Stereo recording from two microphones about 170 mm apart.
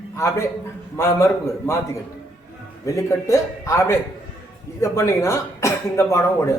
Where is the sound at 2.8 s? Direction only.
15° left (ahead or behind).